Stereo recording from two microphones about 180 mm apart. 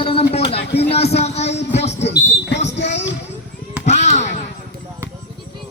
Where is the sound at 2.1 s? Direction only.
75° left (ahead or behind).